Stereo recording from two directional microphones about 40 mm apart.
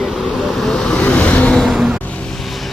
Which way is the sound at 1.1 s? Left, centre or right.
Left.